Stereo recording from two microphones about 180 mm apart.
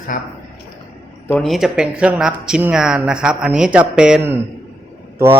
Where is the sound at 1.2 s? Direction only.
5° left (ahead or behind).